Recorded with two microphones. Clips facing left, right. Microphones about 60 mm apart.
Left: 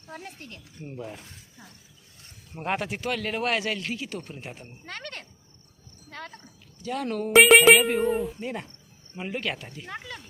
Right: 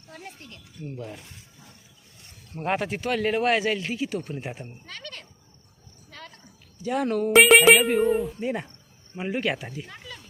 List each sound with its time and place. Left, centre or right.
0.1 s speech: left
2.5 s speech: centre
4.9 s cricket: left
6.1 s a sound: left
6.8 s speech: centre
7.1 s speech: centre